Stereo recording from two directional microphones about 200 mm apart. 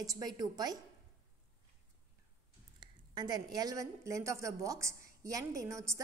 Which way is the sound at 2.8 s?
20° right (ahead or behind).